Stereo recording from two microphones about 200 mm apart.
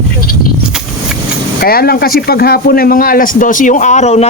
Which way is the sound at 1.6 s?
50° left (ahead or behind).